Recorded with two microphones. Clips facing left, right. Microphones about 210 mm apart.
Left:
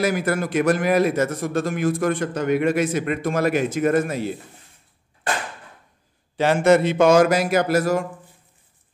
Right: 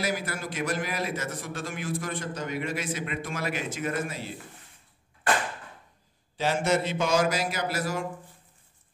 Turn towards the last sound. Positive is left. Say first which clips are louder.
# left 11 dB
turn(degrees=50)  # may be behind; listen again after turning